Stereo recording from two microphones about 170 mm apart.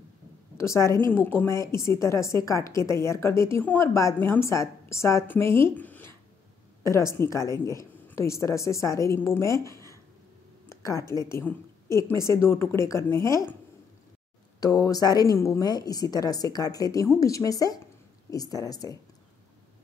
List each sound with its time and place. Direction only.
0.6 s a woman's voice: 15° left (ahead or behind)
10.8 s a woman's voice: 15° left (ahead or behind)
14.6 s a woman's voice: 20° left (ahead or behind)